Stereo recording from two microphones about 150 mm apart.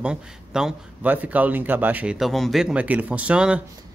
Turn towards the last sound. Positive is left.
turn(degrees=-5)  # may be behind; listen again after turning